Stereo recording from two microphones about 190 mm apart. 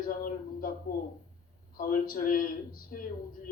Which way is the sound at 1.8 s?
45° left (ahead or behind).